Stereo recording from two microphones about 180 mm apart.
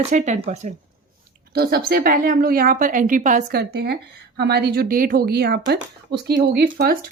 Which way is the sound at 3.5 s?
60° right (ahead or behind).